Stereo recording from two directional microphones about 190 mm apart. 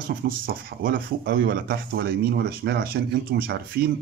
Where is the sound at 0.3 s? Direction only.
50° right (ahead or behind).